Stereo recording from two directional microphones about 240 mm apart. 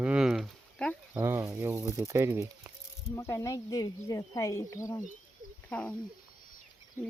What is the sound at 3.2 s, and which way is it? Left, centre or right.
Speech, centre.